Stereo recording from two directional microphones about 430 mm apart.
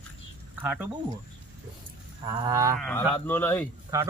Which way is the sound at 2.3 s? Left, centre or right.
Centre.